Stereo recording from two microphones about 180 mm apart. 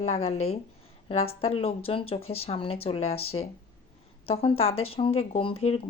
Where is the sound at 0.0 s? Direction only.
35° left (ahead or behind).